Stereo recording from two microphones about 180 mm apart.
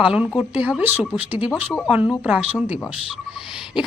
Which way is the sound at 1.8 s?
5° right (ahead or behind).